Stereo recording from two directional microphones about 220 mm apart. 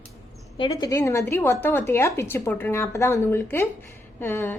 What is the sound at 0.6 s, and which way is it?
A woman's voice, 15° left (ahead or behind).